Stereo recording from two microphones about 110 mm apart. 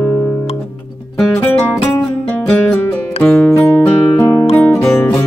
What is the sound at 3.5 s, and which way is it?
Music, 15° left (ahead or behind).